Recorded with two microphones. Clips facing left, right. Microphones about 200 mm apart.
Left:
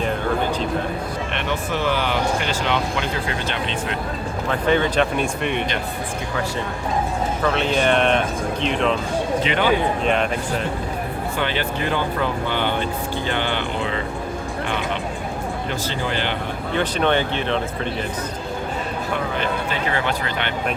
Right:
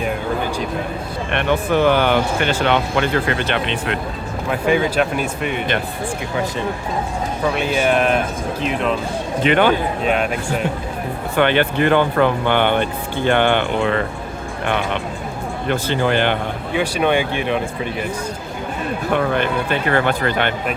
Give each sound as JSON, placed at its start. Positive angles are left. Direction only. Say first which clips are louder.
{"t": 1.3, "sound": "speech", "louder": "right 10 dB", "side_deg": -55}
{"t": 4.4, "sound": "speech", "louder": "right 2 dB", "side_deg": -10}
{"t": 7.4, "sound": "speech", "louder": "right 2 dB", "side_deg": -10}
{"t": 9.4, "sound": "speech", "louder": "right 7 dB", "side_deg": -55}
{"t": 11.3, "sound": "speech", "louder": "right 10 dB", "side_deg": -60}
{"t": 15.7, "sound": "speech", "louder": "right 10 dB", "side_deg": -60}
{"t": 16.7, "sound": "speech", "louder": "right 2 dB", "side_deg": -10}
{"t": 19.1, "sound": "speech", "louder": "right 6 dB", "side_deg": -60}